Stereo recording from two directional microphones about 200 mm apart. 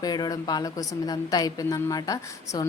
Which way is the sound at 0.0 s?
20° left (ahead or behind).